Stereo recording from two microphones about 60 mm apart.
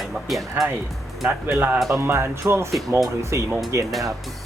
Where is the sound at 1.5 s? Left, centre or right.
Right.